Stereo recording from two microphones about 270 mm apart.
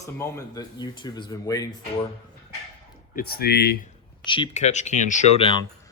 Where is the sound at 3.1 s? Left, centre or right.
Left.